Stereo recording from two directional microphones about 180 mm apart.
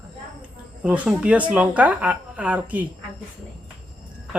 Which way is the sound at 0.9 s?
5° right (ahead or behind).